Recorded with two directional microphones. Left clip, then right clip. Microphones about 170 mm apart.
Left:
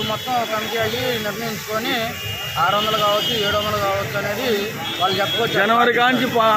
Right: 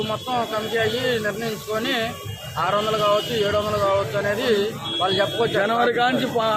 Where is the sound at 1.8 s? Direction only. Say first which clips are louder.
Left 1 dB; 35° right (ahead or behind).